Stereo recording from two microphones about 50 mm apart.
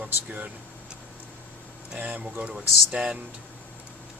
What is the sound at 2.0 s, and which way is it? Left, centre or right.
Speech, right.